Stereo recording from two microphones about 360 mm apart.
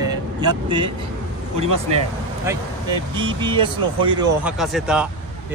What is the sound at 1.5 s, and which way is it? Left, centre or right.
Speech, right.